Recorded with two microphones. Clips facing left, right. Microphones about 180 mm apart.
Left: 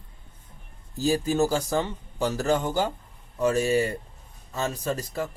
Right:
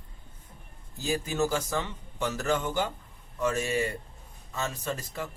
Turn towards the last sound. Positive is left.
turn(degrees=35)  # may be behind; listen again after turning